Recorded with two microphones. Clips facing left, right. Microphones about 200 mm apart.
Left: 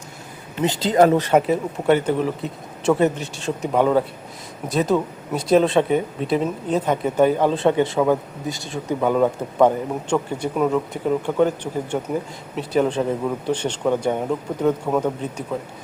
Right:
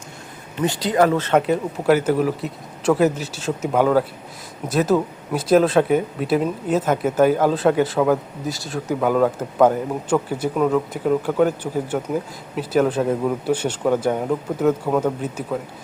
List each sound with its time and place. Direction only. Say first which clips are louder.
0.6 s speech: left 2 dB; 20° left (ahead or behind)
1.2 s a man's voice: even; 5° left (ahead or behind)